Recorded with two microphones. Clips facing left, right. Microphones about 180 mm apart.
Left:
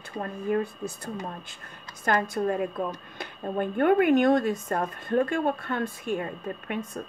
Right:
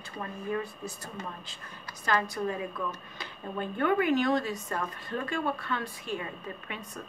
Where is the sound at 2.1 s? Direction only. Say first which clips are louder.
Left 4 dB; 55° left (ahead or behind).